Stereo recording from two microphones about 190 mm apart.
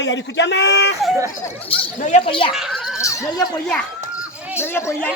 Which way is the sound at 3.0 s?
15° left (ahead or behind).